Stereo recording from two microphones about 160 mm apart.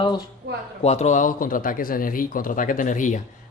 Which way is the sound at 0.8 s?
45° left (ahead or behind).